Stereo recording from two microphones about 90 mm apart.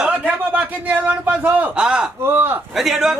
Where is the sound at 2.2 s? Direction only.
25° right (ahead or behind).